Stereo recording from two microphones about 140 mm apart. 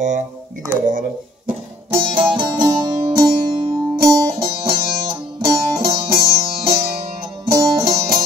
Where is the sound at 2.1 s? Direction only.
35° right (ahead or behind).